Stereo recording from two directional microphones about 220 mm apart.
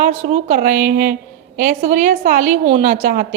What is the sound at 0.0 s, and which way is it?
A woman's voice, 30° right (ahead or behind).